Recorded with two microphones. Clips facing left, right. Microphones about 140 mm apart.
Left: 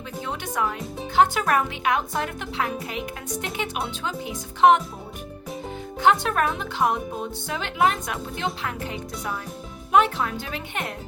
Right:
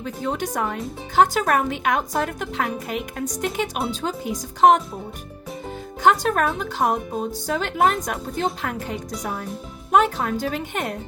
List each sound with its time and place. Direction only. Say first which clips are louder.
0.0 s speech: right 6 dB; 40° right (ahead or behind)
6.0 s speech: right 2 dB; 40° right (ahead or behind)